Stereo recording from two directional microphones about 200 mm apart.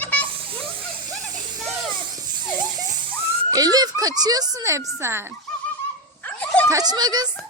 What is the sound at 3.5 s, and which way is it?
A child's voice, 20° right (ahead or behind).